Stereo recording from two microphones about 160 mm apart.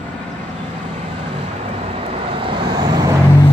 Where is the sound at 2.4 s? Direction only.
30° right (ahead or behind).